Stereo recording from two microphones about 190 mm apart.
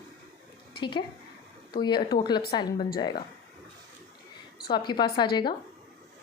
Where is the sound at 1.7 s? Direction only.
25° left (ahead or behind).